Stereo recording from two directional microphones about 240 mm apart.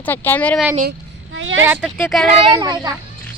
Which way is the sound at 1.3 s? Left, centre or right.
Right.